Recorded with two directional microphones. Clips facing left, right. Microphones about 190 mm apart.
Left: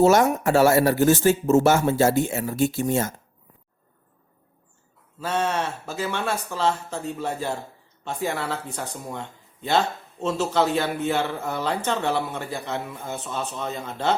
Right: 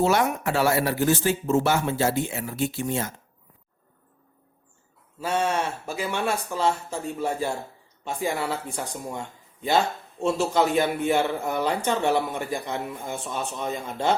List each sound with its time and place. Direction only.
0.0 s speech: 45° left (ahead or behind)
5.2 s speech: 10° right (ahead or behind)